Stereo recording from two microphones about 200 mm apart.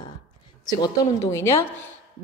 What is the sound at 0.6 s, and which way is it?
A woman's voice, 20° left (ahead or behind).